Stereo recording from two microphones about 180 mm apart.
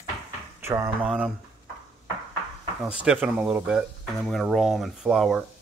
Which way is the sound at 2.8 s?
5° right (ahead or behind).